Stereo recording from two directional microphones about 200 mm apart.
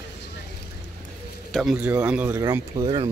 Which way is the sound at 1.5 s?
Centre (ahead or behind).